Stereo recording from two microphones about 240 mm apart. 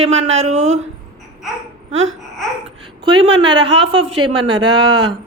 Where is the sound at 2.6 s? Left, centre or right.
Right.